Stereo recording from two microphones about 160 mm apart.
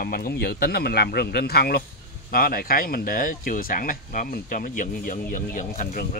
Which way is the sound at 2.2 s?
70° left (ahead or behind).